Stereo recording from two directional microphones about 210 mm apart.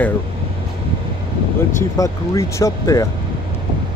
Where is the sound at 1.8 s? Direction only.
15° left (ahead or behind).